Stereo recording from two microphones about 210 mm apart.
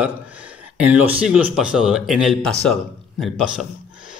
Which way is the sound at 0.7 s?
5° right (ahead or behind).